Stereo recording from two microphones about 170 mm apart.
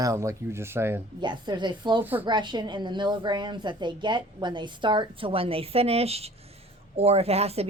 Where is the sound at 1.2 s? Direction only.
25° right (ahead or behind).